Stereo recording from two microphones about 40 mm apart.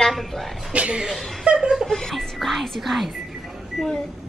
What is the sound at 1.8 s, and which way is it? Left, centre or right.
Music, centre.